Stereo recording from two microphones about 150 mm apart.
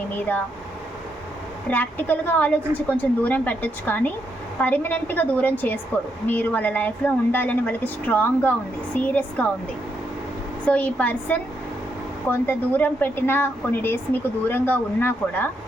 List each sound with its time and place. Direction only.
0.2 s a woman's voice: 10° left (ahead or behind)
1.7 s a woman's voice: 10° left (ahead or behind)
10.7 s a woman's voice: 10° left (ahead or behind)